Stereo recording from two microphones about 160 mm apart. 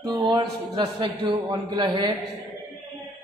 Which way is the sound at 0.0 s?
25° right (ahead or behind).